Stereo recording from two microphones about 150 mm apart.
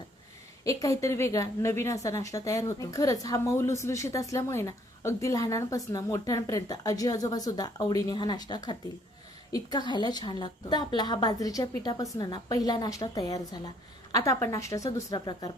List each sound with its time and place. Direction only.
0.6 s a woman's voice: 20° left (ahead or behind)